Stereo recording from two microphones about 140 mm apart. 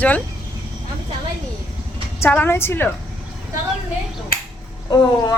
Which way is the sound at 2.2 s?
15° left (ahead or behind).